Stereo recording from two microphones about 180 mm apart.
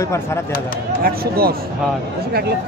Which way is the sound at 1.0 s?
55° right (ahead or behind).